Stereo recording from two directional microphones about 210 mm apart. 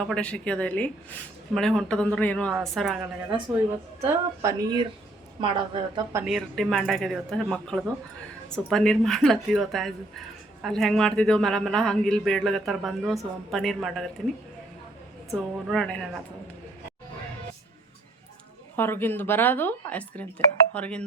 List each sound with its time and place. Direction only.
0.0 s speech: 5° left (ahead or behind)
4.0 s a woman's voice: 20° right (ahead or behind)
6.2 s speech: centre (ahead or behind)
15.4 s speech: 5° left (ahead or behind)
18.8 s a woman's voice: 10° left (ahead or behind)